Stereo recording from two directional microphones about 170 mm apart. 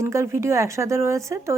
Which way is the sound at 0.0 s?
15° right (ahead or behind).